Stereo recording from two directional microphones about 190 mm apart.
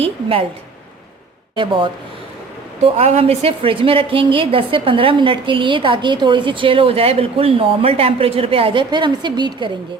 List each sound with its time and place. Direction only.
0.0 s a woman's voice: 30° right (ahead or behind)
1.5 s a woman's voice: 25° right (ahead or behind)